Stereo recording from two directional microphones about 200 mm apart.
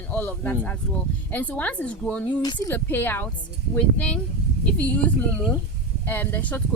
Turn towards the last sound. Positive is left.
turn(degrees=10)  # may be behind; listen again after turning